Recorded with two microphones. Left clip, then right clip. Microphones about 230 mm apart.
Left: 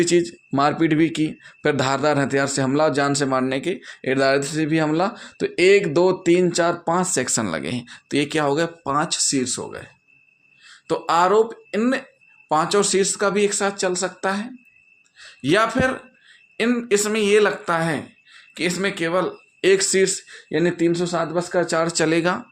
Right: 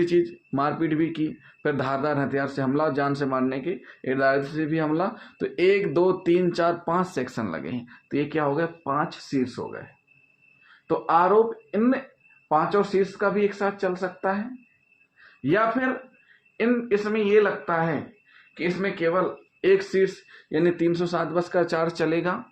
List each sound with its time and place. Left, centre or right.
0.0 s speech: left
10.8 s speech: left
15.4 s speech: left